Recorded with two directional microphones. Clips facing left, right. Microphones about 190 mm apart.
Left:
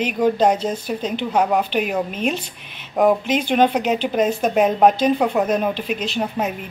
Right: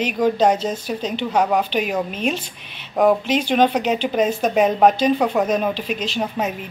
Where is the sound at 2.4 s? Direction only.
50° left (ahead or behind).